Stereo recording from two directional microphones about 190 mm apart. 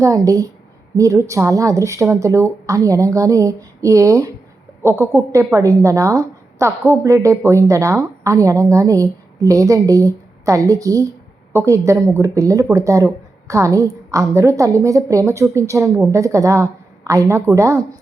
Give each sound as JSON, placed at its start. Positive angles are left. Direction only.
{"t": 0.0, "sound": "a woman's voice", "side_deg": -15}